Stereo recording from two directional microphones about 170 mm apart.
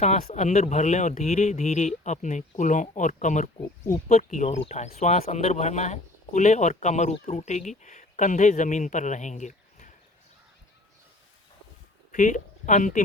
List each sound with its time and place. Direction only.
0.0 s speech: 45° left (ahead or behind)
12.1 s speech: 45° left (ahead or behind)